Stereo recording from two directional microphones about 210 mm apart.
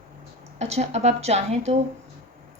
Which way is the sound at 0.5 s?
30° right (ahead or behind).